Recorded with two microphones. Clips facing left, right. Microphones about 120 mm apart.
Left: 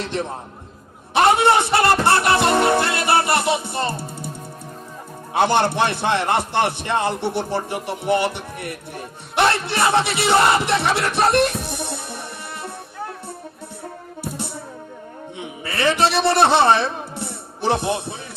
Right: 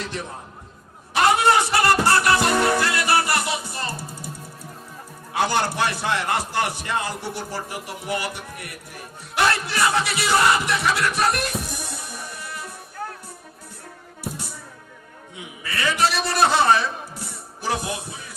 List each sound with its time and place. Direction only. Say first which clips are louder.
0.0 s a man's voice: left 6 dB; 25° left (ahead or behind)
5.3 s a man's voice: left 5 dB; 25° left (ahead or behind)
11.6 s music: left 5 dB; 25° left (ahead or behind)
14.3 s music: left 7 dB; 25° left (ahead or behind)
15.4 s a man's voice: left 5 dB; 30° left (ahead or behind)